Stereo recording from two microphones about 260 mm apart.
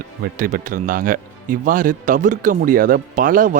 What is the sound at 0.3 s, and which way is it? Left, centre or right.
Speech, right.